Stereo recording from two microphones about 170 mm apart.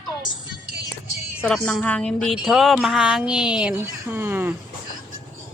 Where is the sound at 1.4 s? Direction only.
5° left (ahead or behind); by 4.6 s 10° right (ahead or behind).